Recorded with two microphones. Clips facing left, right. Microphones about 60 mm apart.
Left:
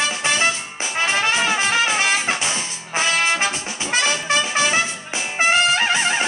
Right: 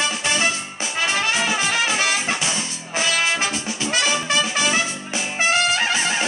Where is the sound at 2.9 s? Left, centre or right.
Left.